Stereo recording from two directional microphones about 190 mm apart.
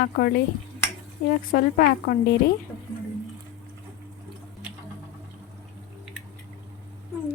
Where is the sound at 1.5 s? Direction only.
50° left (ahead or behind).